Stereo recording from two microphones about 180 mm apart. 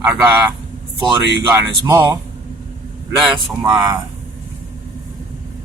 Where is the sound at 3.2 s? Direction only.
Centre (ahead or behind).